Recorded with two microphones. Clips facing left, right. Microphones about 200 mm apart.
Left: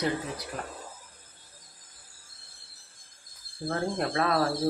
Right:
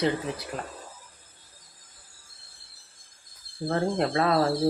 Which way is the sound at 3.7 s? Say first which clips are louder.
Right 4 dB; 25° right (ahead or behind).